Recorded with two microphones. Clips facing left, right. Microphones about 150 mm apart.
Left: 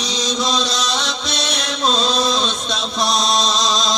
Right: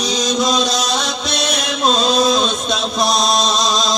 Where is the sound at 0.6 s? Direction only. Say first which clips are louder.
Right 3 dB; 45° right (ahead or behind).